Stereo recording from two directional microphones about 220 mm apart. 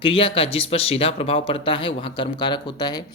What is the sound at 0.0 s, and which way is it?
Speech, 25° left (ahead or behind).